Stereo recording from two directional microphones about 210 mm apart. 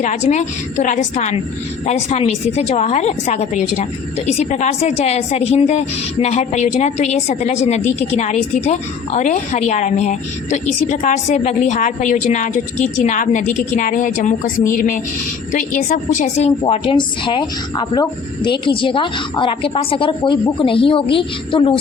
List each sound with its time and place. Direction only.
0.0 s a woman's voice: 35° left (ahead or behind)